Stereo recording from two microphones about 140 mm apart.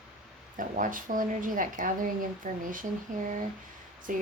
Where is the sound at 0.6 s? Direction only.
75° right (ahead or behind).